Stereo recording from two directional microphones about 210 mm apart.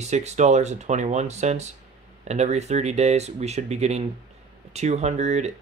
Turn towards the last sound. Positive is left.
turn(degrees=-30)  # may be behind; listen again after turning